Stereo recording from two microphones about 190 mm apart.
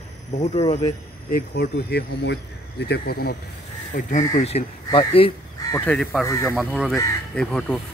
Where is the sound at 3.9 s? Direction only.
40° left (ahead or behind); by 5.8 s 20° left (ahead or behind).